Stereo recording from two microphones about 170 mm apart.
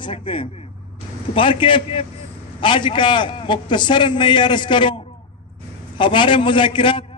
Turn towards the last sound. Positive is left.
turn(degrees=30)  # may be behind; listen again after turning